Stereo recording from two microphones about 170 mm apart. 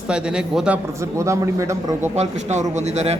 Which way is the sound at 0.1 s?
5° right (ahead or behind).